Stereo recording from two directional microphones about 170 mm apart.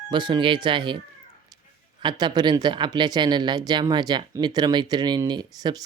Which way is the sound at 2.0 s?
25° right (ahead or behind).